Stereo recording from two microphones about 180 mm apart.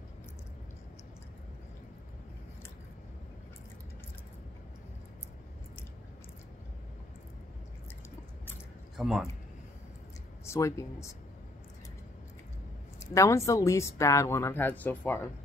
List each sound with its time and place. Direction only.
8.9 s speech: centre (ahead or behind)
10.4 s speech: 15° left (ahead or behind)
13.0 s speech: 15° left (ahead or behind)